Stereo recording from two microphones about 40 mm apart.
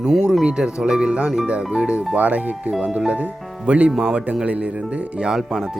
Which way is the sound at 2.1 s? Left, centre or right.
Right.